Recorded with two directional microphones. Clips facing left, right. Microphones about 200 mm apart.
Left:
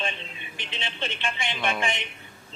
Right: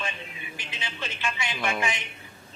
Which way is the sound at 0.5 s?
25° left (ahead or behind).